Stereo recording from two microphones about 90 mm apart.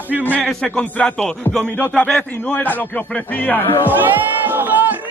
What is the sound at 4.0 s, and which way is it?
Crowd, 20° right (ahead or behind).